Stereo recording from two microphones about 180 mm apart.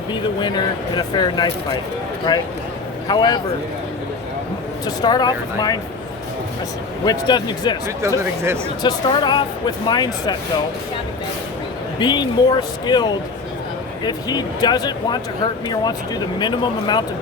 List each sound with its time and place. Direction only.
0.3 s speech: 25° left (ahead or behind)
5.0 s speech: 25° left (ahead or behind)
7.0 s speech: 25° left (ahead or behind)
8.8 s speech: 25° left (ahead or behind)
11.9 s speech: 25° left (ahead or behind)